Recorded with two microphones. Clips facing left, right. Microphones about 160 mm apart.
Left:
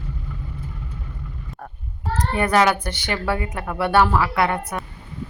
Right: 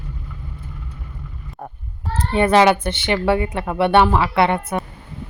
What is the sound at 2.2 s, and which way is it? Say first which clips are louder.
A woman's voice: right 4 dB; 25° right (ahead or behind).